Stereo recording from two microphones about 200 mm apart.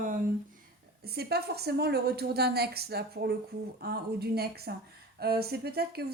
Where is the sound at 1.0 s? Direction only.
55° right (ahead or behind).